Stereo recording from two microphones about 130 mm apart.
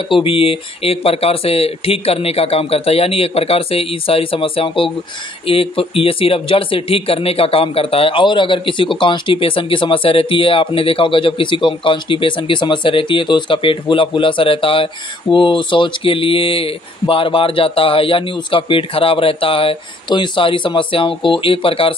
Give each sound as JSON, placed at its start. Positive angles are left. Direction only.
{"t": 0.1, "sound": "speech", "side_deg": 45}